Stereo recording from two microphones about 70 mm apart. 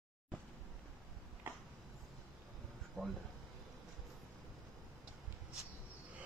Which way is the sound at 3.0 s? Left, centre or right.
Centre.